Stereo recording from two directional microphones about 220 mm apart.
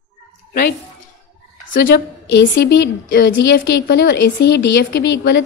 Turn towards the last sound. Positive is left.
turn(degrees=50)  # may be behind; listen again after turning